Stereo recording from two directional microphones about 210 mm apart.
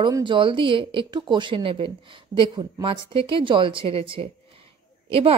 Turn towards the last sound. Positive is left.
turn(degrees=-25)  # may be behind; listen again after turning